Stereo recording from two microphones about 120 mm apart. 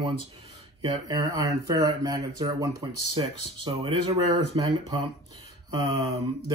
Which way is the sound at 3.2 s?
50° right (ahead or behind).